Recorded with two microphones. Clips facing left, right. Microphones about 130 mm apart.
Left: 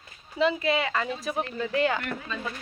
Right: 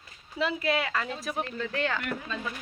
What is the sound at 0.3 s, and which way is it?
A woman's voice, centre (ahead or behind).